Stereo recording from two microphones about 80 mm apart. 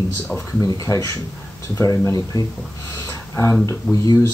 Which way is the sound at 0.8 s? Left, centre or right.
Left.